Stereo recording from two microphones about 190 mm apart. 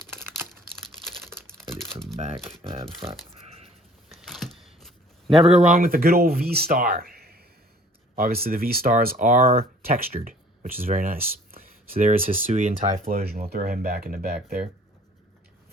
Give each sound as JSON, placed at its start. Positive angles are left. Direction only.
{"t": 0.0, "sound": "computer keyboard", "side_deg": -10}
{"t": 1.7, "sound": "shuffling cards", "side_deg": 0}
{"t": 2.6, "sound": "speech", "side_deg": -30}
{"t": 4.2, "sound": "a sound", "side_deg": 0}
{"t": 5.4, "sound": "speech", "side_deg": -35}
{"t": 10.1, "sound": "speech", "side_deg": -40}